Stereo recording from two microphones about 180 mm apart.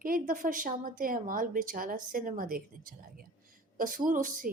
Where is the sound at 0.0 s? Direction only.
50° right (ahead or behind).